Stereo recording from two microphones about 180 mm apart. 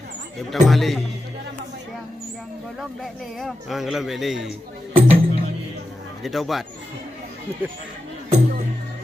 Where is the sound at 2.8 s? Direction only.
Centre (ahead or behind).